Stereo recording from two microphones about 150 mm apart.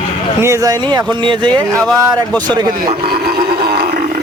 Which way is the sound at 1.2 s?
30° right (ahead or behind).